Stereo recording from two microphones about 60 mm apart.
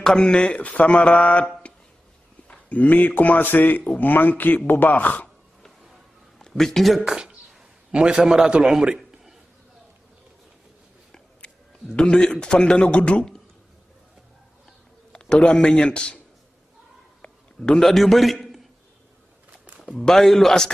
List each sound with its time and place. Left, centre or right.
0.0 s speech: centre
6.3 s a man's voice: centre
7.1 s a man's voice: centre
11.1 s a man's voice: centre
15.1 s a man's voice: centre
17.2 s a sound: centre
19.8 s a man's voice: centre